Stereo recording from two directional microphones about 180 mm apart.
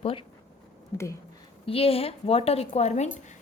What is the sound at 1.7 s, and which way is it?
A woman's voice, 30° left (ahead or behind).